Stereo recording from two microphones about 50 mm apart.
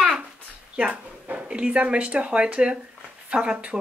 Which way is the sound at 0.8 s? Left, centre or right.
Right.